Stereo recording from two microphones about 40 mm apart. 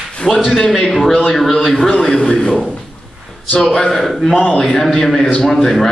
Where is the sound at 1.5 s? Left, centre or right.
Centre.